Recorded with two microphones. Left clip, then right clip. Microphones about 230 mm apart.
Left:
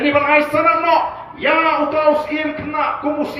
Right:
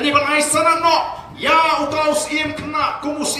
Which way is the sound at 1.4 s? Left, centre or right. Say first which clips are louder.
Even; right.